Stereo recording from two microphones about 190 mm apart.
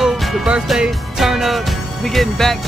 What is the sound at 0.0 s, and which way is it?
Speech, centre (ahead or behind).